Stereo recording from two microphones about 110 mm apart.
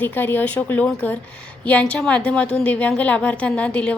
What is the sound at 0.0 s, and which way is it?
A woman's voice, 20° left (ahead or behind).